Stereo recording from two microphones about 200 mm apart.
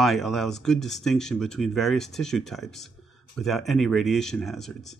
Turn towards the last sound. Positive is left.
turn(degrees=0)  # may be behind; listen again after turning